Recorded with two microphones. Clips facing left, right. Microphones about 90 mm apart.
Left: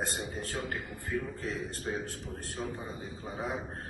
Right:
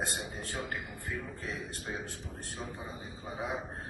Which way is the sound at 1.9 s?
10° left (ahead or behind).